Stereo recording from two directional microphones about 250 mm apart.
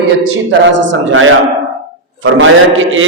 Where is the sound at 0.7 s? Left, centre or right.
Right.